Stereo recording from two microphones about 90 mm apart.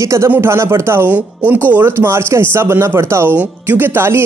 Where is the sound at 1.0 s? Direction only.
20° right (ahead or behind).